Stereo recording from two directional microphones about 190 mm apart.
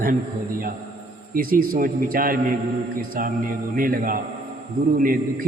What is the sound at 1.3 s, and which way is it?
A man's voice, 50° right (ahead or behind).